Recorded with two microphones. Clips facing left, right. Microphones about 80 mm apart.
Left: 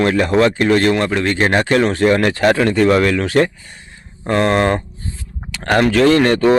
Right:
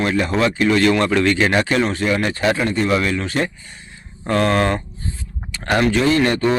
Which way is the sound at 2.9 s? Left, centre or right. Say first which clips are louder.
Left 6 dB; left.